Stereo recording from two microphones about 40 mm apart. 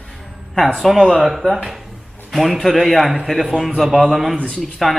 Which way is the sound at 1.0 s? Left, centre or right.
Centre.